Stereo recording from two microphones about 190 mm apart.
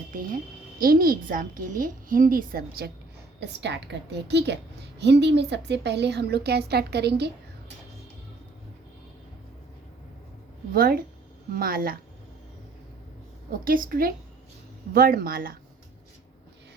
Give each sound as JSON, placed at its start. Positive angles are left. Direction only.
{"t": 0.8, "sound": "a woman's voice", "side_deg": -50}
{"t": 3.4, "sound": "a woman's voice", "side_deg": -65}
{"t": 10.7, "sound": "a woman's voice", "side_deg": -50}
{"t": 13.5, "sound": "a woman's voice", "side_deg": -45}